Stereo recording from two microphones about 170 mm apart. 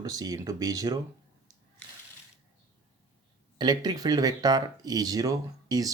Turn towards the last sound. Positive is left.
turn(degrees=-20)  # may be behind; listen again after turning